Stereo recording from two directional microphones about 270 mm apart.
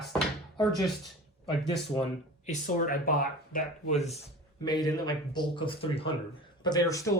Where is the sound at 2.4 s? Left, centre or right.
Left.